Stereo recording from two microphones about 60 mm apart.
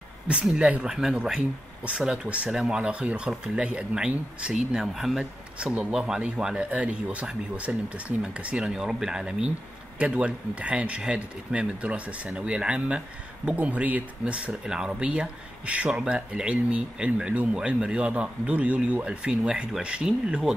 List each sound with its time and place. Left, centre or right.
0.3 s speech: centre
5.7 s speech: right
9.9 s speech: right
15.9 s speech: centre